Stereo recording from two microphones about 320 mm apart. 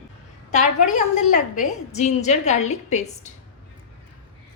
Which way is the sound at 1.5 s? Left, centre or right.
Left.